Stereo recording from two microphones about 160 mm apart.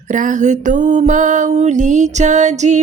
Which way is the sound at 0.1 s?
50° right (ahead or behind).